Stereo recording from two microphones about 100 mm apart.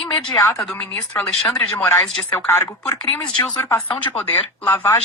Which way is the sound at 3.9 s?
10° left (ahead or behind).